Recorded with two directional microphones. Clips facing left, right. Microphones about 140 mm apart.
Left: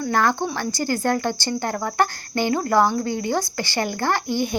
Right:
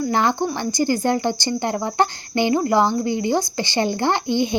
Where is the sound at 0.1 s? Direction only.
20° right (ahead or behind).